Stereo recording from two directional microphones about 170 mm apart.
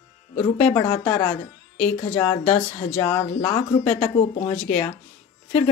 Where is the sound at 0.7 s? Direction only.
35° left (ahead or behind).